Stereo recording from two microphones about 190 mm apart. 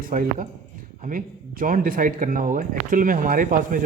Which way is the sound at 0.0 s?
45° right (ahead or behind).